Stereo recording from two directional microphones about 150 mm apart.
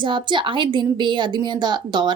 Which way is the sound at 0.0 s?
30° right (ahead or behind).